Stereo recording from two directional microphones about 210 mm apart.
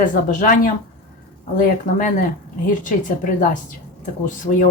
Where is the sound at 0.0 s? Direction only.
40° left (ahead or behind).